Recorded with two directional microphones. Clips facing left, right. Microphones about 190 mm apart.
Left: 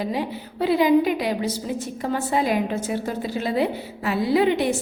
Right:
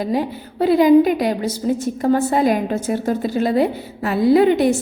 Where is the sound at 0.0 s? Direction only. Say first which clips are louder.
Right 5 dB; 45° right (ahead or behind).